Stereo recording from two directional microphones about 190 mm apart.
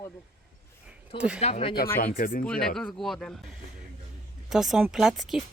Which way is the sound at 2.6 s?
5° left (ahead or behind).